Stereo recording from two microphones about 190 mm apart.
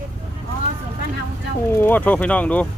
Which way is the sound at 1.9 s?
10° left (ahead or behind).